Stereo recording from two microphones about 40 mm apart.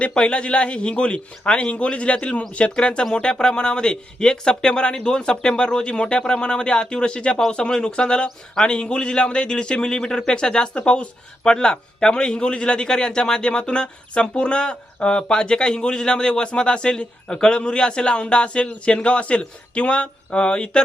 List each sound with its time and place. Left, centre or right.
0.0 s a man's voice: left